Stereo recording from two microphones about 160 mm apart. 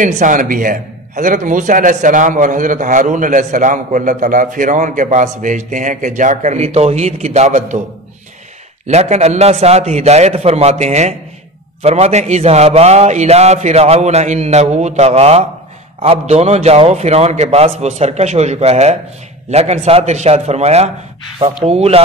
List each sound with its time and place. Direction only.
0.0 s a man's voice: 55° right (ahead or behind)
8.8 s a man's voice: 45° right (ahead or behind)